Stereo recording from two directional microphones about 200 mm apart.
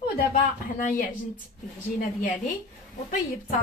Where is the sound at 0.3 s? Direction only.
40° left (ahead or behind).